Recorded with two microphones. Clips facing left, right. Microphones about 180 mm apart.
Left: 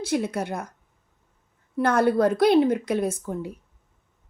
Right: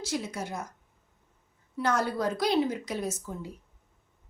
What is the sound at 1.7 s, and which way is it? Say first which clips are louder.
A woman's voice: left 8 dB; 55° left (ahead or behind).